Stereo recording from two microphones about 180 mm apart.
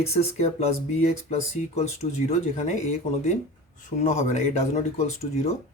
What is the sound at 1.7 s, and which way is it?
Speech, 35° left (ahead or behind).